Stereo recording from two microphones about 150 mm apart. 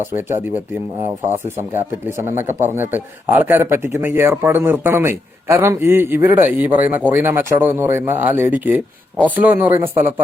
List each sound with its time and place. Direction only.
0.1 s speech: 15° right (ahead or behind)
2.0 s speech: 20° right (ahead or behind)